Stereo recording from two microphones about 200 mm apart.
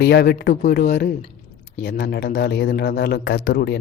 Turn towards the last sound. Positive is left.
turn(degrees=50)  # may be behind; listen again after turning